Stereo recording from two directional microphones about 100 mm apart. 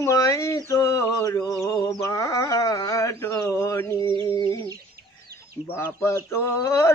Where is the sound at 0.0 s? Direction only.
35° left (ahead or behind).